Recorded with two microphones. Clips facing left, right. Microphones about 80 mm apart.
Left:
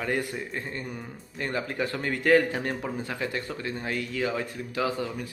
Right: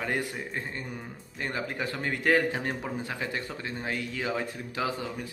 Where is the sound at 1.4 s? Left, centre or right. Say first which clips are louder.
Left 3 dB; centre.